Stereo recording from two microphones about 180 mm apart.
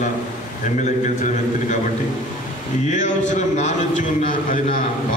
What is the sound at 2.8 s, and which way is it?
A man's voice, 40° left (ahead or behind).